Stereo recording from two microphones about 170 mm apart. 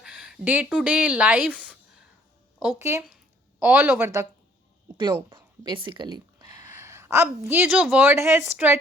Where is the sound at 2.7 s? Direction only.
15° right (ahead or behind).